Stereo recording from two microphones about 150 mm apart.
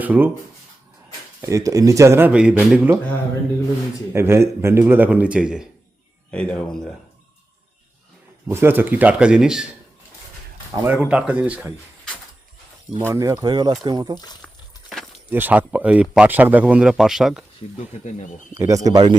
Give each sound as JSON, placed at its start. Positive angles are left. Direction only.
{"t": 0.0, "sound": "speech", "side_deg": -10}
{"t": 1.4, "sound": "speech", "side_deg": -20}
{"t": 4.1, "sound": "speech", "side_deg": -15}
{"t": 6.3, "sound": "speech", "side_deg": 5}
{"t": 8.4, "sound": "speech", "side_deg": -15}
{"t": 10.8, "sound": "speech", "side_deg": -10}
{"t": 13.0, "sound": "speech", "side_deg": -20}
{"t": 14.4, "sound": "a sound", "side_deg": 0}
{"t": 15.3, "sound": "speech", "side_deg": -10}
{"t": 18.5, "sound": "speech", "side_deg": -20}